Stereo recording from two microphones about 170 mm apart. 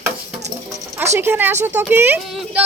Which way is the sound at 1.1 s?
15° right (ahead or behind).